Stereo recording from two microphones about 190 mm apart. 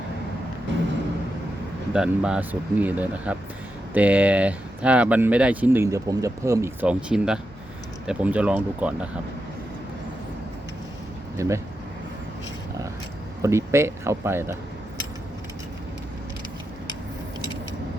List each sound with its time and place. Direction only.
1.9 s speech: 5° right (ahead or behind)
11.3 s speech: 15° right (ahead or behind)
13.4 s speech: 15° right (ahead or behind)